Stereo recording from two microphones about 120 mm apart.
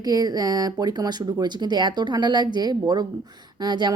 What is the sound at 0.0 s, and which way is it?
Speech, 30° right (ahead or behind).